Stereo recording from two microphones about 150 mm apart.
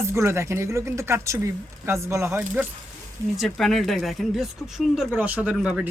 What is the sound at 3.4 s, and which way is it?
Speech, centre (ahead or behind).